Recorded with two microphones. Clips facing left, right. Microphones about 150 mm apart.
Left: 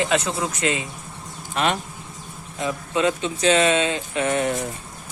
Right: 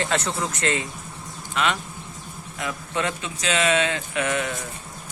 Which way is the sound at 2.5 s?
25° left (ahead or behind).